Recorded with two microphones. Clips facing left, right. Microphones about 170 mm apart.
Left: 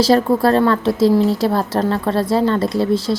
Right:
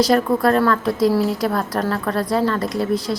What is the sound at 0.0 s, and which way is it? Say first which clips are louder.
A woman's voice: left 2 dB; 30° left (ahead or behind).